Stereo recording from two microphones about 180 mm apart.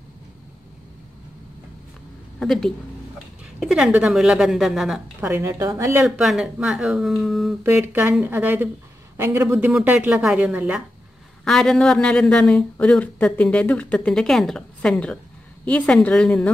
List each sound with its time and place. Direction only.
2.4 s speech: 5° left (ahead or behind)
5.2 s speech: 15° right (ahead or behind)
6.0 s speech: centre (ahead or behind)
7.6 s speech: 15° right (ahead or behind)
9.7 s speech: 5° right (ahead or behind)